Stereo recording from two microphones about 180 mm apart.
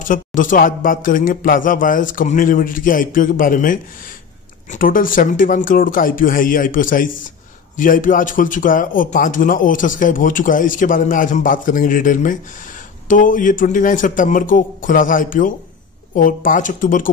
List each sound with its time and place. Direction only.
0.1 s a man's voice: 45° left (ahead or behind)